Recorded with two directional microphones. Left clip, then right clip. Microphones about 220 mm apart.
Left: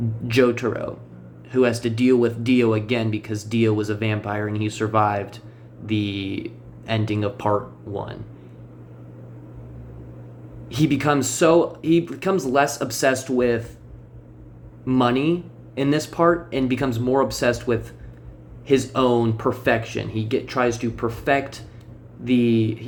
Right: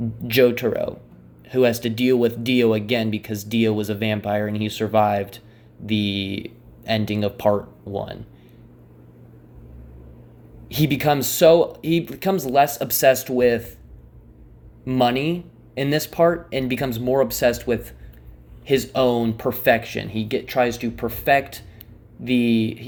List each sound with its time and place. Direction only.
0.3 s speech: 35° right (ahead or behind)
10.7 s speech: 35° right (ahead or behind)
14.8 s speech: 35° right (ahead or behind)